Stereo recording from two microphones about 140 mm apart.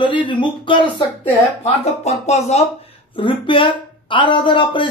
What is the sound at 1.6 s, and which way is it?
A man's voice, 50° left (ahead or behind).